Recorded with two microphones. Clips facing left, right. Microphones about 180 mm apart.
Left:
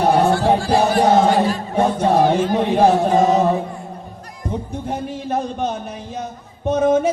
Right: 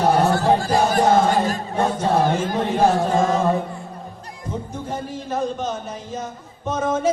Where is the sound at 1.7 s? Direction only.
60° left (ahead or behind).